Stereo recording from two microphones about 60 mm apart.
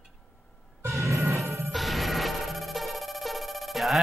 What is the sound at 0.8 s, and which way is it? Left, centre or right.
Music, right.